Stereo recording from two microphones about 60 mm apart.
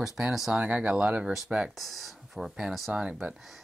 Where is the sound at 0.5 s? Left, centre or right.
Centre.